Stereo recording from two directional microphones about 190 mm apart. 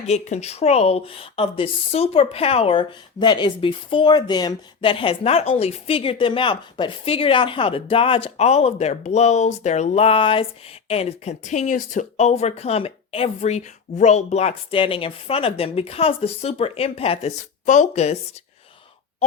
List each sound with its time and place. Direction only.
0.1 s speech: 35° left (ahead or behind)